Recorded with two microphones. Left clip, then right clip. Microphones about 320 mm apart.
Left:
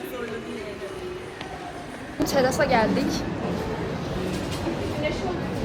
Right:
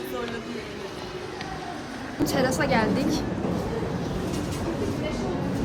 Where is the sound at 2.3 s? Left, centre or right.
Centre.